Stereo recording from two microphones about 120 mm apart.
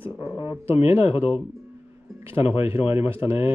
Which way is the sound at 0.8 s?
60° left (ahead or behind).